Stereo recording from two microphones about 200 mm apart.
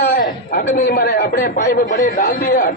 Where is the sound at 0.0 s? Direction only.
45° left (ahead or behind).